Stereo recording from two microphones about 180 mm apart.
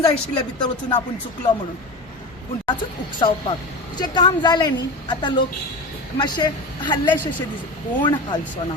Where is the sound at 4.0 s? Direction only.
25° left (ahead or behind).